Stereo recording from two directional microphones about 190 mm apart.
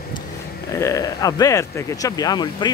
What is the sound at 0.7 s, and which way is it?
Speech, 15° left (ahead or behind).